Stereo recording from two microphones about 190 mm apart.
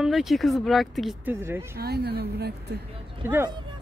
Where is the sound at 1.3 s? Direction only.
15° right (ahead or behind).